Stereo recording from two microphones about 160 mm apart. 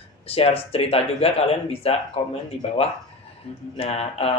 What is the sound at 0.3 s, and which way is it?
Speech, 35° left (ahead or behind).